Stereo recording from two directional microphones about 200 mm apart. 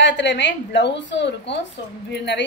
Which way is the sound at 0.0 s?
65° left (ahead or behind).